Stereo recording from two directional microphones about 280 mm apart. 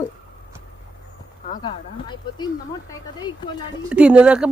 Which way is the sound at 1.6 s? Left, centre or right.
Centre.